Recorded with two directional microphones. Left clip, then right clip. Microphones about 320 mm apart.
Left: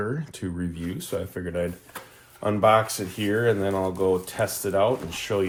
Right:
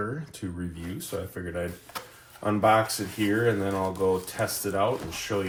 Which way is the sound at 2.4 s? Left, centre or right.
Centre.